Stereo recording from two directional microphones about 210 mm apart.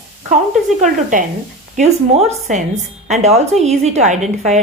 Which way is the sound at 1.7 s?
30° right (ahead or behind).